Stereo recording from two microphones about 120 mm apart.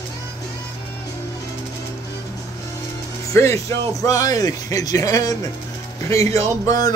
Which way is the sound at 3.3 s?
25° left (ahead or behind).